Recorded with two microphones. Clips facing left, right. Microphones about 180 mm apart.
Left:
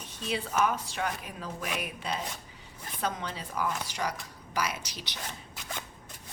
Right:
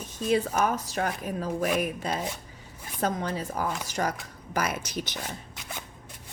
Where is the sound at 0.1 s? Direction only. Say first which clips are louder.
Right 8 dB; 45° right (ahead or behind).